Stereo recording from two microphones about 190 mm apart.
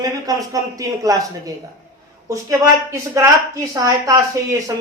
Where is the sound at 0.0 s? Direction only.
20° right (ahead or behind).